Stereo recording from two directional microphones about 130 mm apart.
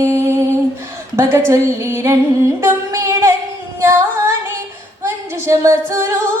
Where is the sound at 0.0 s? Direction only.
20° right (ahead or behind).